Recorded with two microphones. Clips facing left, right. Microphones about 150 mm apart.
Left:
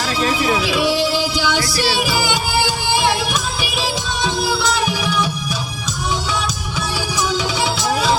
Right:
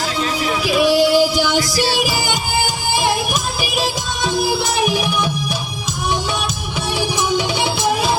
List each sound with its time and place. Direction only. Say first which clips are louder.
0.7 s music: right 4 dB; 50° right (ahead or behind)
1.5 s music: right 1 dB; 20° right (ahead or behind)
3.6 s music: right 1 dB; 45° right (ahead or behind)
7.2 s music: left 1 dB; 55° right (ahead or behind)